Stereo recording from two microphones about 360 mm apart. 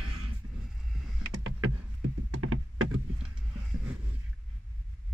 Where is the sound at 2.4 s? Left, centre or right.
Right.